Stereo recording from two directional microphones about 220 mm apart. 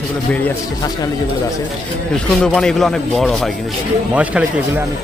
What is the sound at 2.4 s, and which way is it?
Speech, 5° left (ahead or behind).